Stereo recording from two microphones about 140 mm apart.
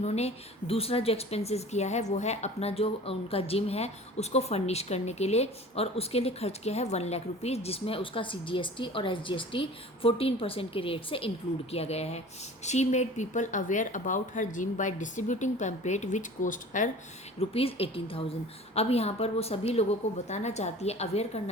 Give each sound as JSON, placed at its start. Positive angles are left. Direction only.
{"t": 0.0, "sound": "a woman's voice", "side_deg": 50}
{"t": 17.5, "sound": "a woman's voice", "side_deg": 45}